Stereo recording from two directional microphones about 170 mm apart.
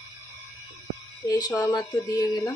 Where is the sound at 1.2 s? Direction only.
20° left (ahead or behind).